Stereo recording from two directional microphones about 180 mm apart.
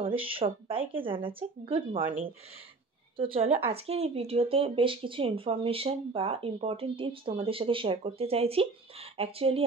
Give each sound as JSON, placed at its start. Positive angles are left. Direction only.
{"t": 0.2, "sound": "speech", "side_deg": -30}
{"t": 3.2, "sound": "speech", "side_deg": -30}